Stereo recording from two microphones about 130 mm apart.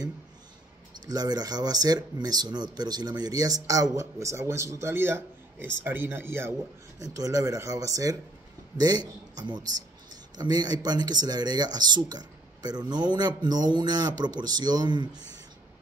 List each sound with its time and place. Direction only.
1.0 s a man's voice: 30° right (ahead or behind)